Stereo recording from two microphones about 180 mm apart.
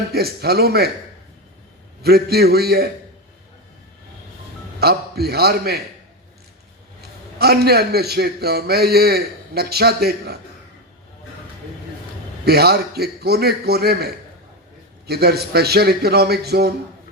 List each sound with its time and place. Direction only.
0.1 s a man's voice: 60° right (ahead or behind)
2.0 s a man's voice: 60° right (ahead or behind)
4.8 s a man's voice: 60° right (ahead or behind)
7.0 s a man's voice: 60° right (ahead or behind)
12.5 s a man's voice: 60° right (ahead or behind)